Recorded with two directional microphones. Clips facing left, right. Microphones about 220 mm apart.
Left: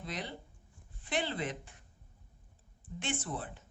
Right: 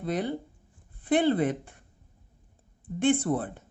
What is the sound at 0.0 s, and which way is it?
Speech, 55° right (ahead or behind).